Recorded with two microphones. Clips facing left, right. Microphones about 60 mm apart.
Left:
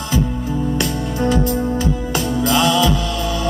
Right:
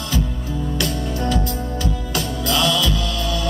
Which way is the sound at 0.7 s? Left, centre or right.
Left.